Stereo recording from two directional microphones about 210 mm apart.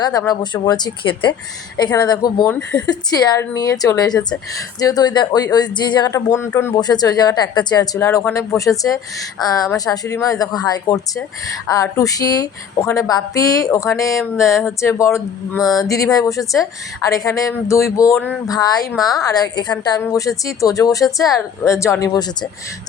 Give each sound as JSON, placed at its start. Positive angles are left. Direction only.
{"t": 0.0, "sound": "a woman's voice", "side_deg": 15}